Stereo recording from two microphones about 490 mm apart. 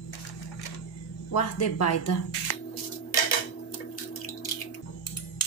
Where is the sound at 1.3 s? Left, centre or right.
Left.